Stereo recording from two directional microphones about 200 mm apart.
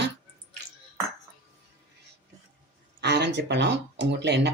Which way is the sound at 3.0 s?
60° right (ahead or behind).